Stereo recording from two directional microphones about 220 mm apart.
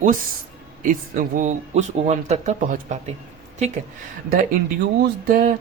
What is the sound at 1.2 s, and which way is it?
Speech, 35° right (ahead or behind).